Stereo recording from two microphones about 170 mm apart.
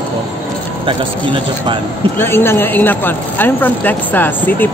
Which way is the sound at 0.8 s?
30° right (ahead or behind).